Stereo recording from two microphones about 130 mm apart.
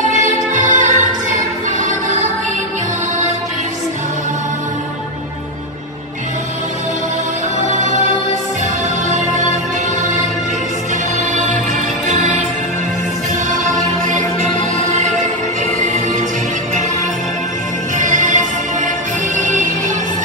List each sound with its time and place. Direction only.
0.5 s music: 75° right (ahead or behind)
9.1 s music: 70° right (ahead or behind)
12.1 s music: 65° right (ahead or behind)
15.0 s music: 70° right (ahead or behind)
17.9 s music: 75° right (ahead or behind)
19.3 s music: 75° right (ahead or behind)